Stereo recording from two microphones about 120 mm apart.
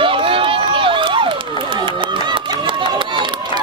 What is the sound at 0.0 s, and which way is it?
Crowd, 45° right (ahead or behind).